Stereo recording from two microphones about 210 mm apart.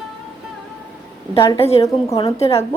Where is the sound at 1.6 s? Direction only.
30° left (ahead or behind).